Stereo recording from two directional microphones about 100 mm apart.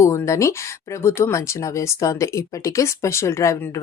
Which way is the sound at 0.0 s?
30° left (ahead or behind).